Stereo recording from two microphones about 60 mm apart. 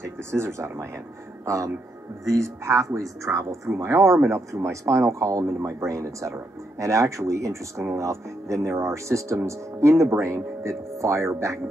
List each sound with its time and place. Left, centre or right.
0.0 s speech: right